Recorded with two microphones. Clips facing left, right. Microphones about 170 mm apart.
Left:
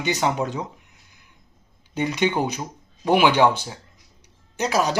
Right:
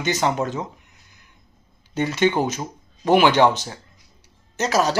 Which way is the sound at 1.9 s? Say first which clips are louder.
Right 2 dB; 15° left (ahead or behind).